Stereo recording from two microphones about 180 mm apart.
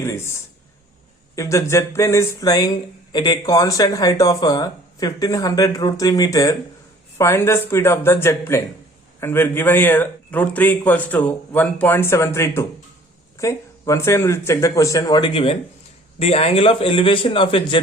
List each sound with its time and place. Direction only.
0.0 s a man's voice: 15° left (ahead or behind)